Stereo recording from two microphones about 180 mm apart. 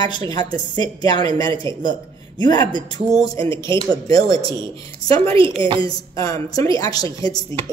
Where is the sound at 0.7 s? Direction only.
20° left (ahead or behind).